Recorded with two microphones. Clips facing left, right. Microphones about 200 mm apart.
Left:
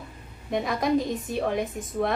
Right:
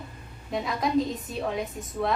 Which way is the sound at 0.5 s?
55° left (ahead or behind).